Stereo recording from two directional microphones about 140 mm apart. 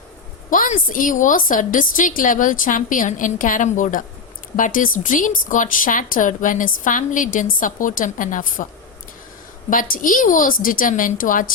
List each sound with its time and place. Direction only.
0.9 s speech: 75° left (ahead or behind)
9.6 s speech: 80° left